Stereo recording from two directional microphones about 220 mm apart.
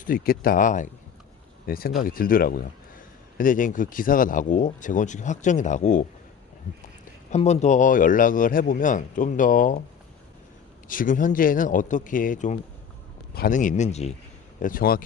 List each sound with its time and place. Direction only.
0.0 s speech: 40° left (ahead or behind)
7.3 s speech: 30° left (ahead or behind)
10.8 s speech: 40° left (ahead or behind)
14.6 s speech: 40° left (ahead or behind)